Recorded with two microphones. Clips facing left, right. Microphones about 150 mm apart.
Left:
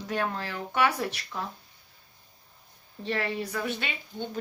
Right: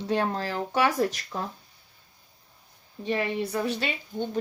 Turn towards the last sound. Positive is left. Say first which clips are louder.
# right 5 dB
turn(degrees=-40)  # may be behind; listen again after turning